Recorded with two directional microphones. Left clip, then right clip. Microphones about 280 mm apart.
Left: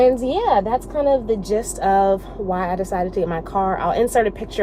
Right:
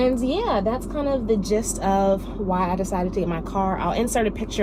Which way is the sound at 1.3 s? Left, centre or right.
Left.